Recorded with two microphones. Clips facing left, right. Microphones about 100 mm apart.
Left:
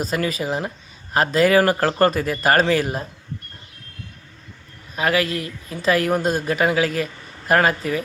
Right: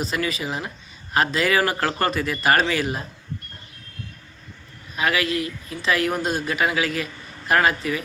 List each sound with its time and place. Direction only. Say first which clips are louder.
0.0 s speech: left 3 dB; 45° left (ahead or behind)
4.9 s a woman's voice: left 2 dB; 40° left (ahead or behind)